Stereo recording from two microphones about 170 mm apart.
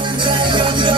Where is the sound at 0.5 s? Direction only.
30° right (ahead or behind).